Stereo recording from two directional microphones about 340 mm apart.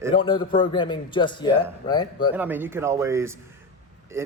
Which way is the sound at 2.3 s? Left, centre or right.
Centre.